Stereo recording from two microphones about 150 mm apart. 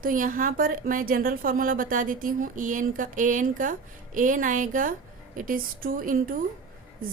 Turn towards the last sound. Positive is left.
turn(degrees=-70)  # may be behind; listen again after turning